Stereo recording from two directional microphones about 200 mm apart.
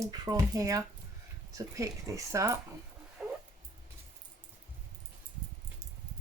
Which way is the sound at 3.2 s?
5° right (ahead or behind).